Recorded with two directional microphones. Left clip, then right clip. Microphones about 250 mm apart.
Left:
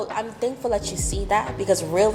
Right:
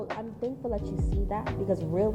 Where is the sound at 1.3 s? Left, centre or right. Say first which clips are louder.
Left 10 dB; centre.